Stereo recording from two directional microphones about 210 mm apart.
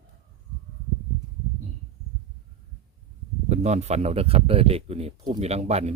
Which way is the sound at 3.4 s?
35° right (ahead or behind).